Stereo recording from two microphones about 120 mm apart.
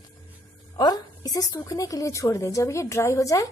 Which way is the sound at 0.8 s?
30° left (ahead or behind).